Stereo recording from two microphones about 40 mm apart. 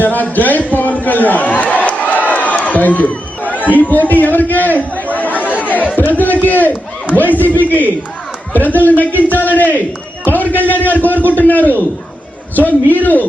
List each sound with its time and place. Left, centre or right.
0.0 s a man's voice: left
0.3 s a sound: left
6.0 s a man's voice: left